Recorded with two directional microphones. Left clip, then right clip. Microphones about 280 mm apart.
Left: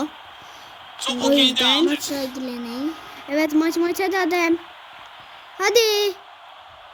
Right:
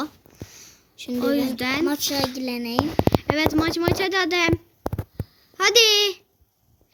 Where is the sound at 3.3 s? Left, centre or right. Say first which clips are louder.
Left 2 dB; centre.